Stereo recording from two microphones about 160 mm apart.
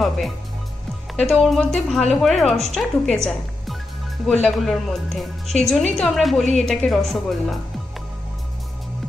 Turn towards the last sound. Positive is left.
turn(degrees=0)  # may be behind; listen again after turning